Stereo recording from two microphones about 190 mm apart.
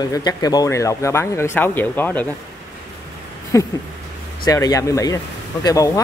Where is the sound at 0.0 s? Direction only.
20° left (ahead or behind).